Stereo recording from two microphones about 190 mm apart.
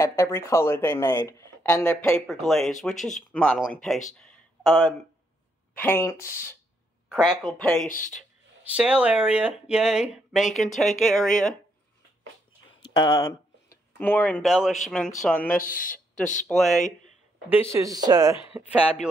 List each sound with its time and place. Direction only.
0.0 s speech: 15° left (ahead or behind); by 4.9 s 5° right (ahead or behind)
5.8 s speech: 10° left (ahead or behind)
7.1 s speech: centre (ahead or behind)
7.8 s speech: 40° left (ahead or behind)
8.2 s speech: 5° right (ahead or behind)
12.9 s speech: 20° left (ahead or behind)
14.5 s speech: 5° right (ahead or behind)
15.2 s speech: 10° left (ahead or behind)
15.5 s speech: 45° left (ahead or behind)
16.4 s speech: centre (ahead or behind)
17.5 s speech: 15° right (ahead or behind)